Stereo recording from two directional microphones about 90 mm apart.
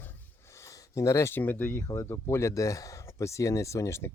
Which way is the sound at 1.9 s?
40° left (ahead or behind).